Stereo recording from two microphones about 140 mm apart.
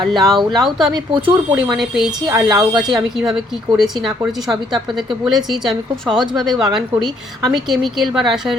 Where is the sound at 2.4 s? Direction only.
5° right (ahead or behind).